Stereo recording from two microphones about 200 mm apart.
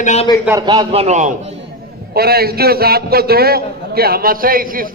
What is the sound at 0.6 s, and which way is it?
Speech, 20° right (ahead or behind).